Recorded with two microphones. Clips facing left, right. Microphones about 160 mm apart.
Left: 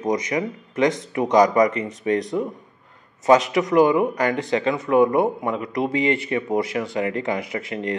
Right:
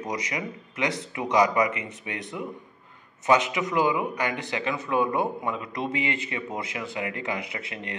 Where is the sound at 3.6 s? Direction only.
40° left (ahead or behind).